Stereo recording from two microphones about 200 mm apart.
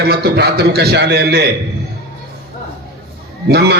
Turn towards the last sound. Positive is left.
turn(degrees=-55)  # may be behind; listen again after turning